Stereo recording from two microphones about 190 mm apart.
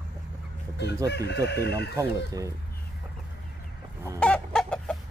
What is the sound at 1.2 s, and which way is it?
Speech, 60° left (ahead or behind).